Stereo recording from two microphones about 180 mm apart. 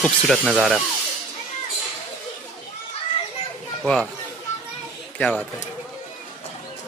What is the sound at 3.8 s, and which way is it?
Speech, 5° left (ahead or behind).